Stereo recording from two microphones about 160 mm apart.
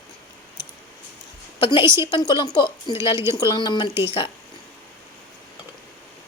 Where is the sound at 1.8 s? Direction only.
15° right (ahead or behind).